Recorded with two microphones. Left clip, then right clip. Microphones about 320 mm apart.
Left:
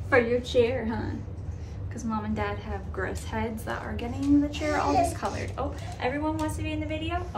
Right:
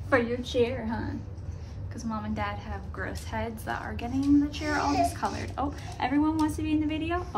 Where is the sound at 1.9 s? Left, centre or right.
Centre.